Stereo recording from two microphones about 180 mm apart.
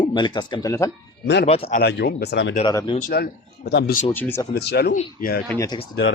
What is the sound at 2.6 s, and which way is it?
Speech, 25° left (ahead or behind).